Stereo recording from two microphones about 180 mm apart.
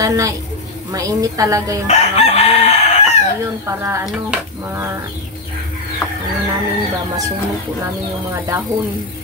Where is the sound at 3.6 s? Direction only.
15° right (ahead or behind).